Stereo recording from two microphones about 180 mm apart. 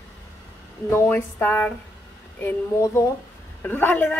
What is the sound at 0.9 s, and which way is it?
A woman's voice, 15° left (ahead or behind).